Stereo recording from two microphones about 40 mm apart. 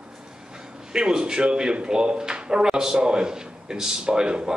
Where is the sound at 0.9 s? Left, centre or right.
Centre.